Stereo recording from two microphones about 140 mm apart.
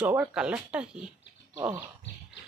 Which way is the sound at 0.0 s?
10° right (ahead or behind).